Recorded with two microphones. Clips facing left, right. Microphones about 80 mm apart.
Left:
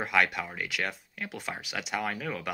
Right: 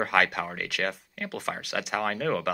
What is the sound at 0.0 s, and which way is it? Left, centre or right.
Speech, right.